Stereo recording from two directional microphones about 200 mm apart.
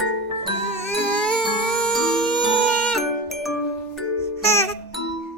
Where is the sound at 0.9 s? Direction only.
5° left (ahead or behind).